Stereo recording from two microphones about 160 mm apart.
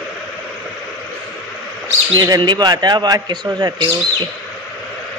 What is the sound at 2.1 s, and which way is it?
A man's voice, 25° right (ahead or behind).